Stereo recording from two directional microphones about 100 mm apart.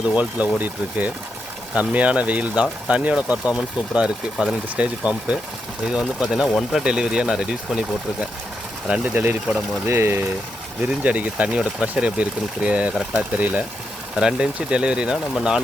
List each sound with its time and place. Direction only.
0.2 s speech: 15° right (ahead or behind)
8.9 s speech: 15° right (ahead or behind)
9.8 s speech: 25° right (ahead or behind); by 15.6 s 5° right (ahead or behind)